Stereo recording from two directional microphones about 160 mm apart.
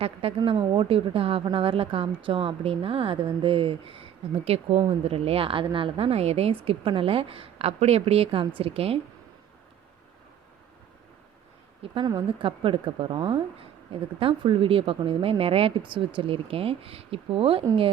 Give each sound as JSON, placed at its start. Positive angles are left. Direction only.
{"t": 0.0, "sound": "speech", "side_deg": -35}
{"t": 11.8, "sound": "speech", "side_deg": -35}